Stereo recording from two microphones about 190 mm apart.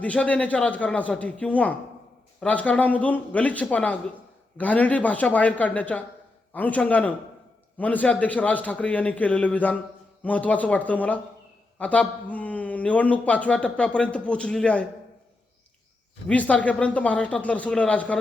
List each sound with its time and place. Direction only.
0.0 s a man's voice: 5° left (ahead or behind)
16.3 s a man's voice: 5° left (ahead or behind)